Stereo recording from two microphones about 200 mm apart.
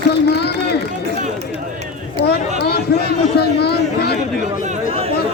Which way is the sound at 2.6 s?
55° left (ahead or behind).